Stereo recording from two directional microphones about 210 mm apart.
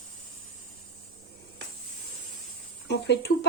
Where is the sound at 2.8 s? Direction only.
55° left (ahead or behind).